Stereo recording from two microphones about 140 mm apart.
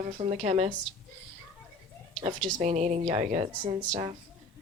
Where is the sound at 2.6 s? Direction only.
60° right (ahead or behind).